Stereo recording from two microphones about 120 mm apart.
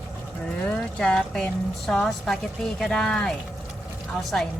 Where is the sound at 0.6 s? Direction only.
5° left (ahead or behind).